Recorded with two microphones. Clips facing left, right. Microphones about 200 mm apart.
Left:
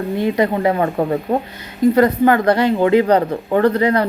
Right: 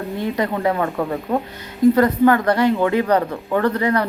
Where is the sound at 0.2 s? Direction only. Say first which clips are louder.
Left 4 dB; 15° left (ahead or behind).